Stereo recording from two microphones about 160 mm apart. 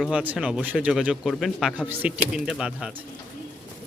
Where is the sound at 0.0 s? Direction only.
5° right (ahead or behind).